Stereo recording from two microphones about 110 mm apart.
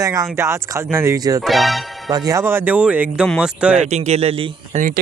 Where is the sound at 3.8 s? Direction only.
90° right; by 4.8 s 65° right (ahead or behind).